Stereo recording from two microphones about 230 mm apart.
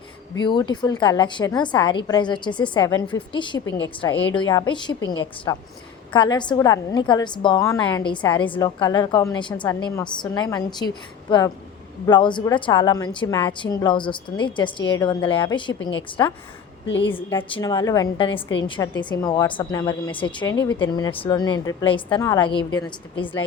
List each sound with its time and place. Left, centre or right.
0.3 s a woman's voice: centre
16.8 s a woman's voice: left
17.3 s a woman's voice: centre